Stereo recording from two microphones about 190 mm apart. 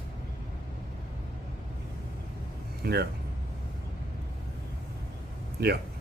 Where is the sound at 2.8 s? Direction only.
60° right (ahead or behind).